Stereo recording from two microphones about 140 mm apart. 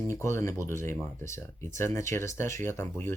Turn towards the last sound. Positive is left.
turn(degrees=15)  # may be behind; listen again after turning